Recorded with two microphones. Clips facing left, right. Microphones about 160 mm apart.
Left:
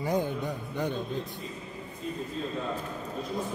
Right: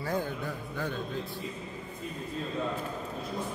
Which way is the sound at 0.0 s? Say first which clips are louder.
Left 4 dB; 20° left (ahead or behind).